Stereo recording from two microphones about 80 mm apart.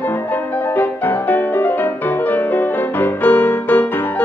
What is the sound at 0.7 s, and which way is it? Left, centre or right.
Music, left.